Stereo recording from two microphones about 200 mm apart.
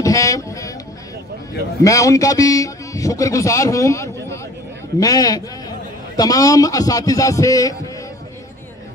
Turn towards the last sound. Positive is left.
turn(degrees=15)  # may be behind; listen again after turning